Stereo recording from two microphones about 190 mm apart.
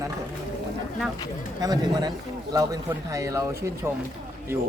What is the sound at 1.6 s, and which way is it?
Speech, 20° right (ahead or behind).